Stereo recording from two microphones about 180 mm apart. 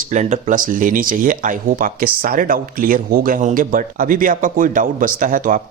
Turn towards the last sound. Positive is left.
turn(degrees=-50)  # may be behind; listen again after turning